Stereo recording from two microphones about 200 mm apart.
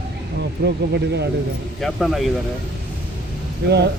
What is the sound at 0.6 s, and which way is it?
Speech, 55° right (ahead or behind).